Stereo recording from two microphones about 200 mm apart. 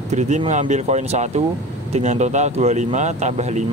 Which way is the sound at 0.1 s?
35° right (ahead or behind).